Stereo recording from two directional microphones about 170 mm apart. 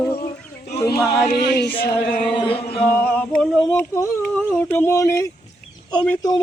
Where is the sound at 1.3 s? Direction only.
80° left.